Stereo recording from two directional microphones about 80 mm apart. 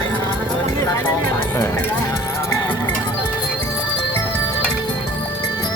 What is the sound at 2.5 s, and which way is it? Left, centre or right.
Music, left.